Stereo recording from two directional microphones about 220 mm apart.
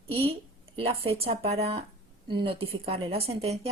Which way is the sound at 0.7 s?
25° right (ahead or behind).